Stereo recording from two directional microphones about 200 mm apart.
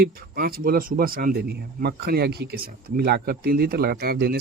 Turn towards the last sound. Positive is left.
turn(degrees=-50)  # may be behind; listen again after turning